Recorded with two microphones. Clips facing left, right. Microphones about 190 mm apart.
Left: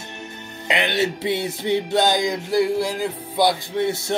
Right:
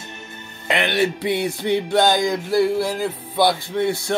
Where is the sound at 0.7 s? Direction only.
20° left (ahead or behind).